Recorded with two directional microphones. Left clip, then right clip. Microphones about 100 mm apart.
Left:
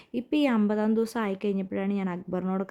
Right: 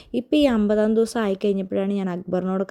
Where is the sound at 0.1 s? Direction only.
30° right (ahead or behind).